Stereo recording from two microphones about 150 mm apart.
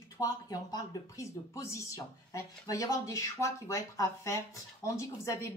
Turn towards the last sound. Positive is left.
turn(degrees=20)  # may be behind; listen again after turning